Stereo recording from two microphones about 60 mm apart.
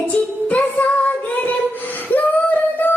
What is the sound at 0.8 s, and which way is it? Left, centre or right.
Music, left.